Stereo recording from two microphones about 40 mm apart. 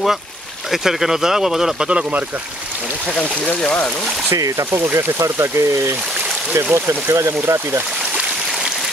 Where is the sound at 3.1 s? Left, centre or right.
Left.